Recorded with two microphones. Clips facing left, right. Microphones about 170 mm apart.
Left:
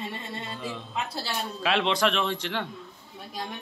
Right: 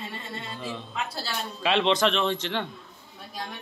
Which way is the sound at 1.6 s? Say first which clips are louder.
Right 2 dB; 5° left (ahead or behind).